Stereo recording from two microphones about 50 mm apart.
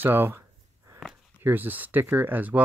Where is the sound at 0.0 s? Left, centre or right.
Right.